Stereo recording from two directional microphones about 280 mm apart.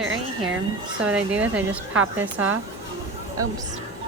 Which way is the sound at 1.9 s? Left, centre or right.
Right.